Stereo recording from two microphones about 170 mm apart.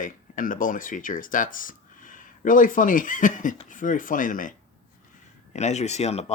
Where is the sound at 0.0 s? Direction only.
50° left (ahead or behind).